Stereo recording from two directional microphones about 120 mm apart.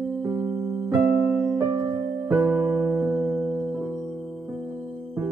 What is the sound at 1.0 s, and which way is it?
Electric piano, 15° right (ahead or behind).